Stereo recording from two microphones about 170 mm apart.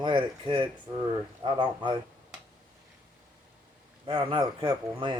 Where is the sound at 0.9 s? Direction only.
20° right (ahead or behind).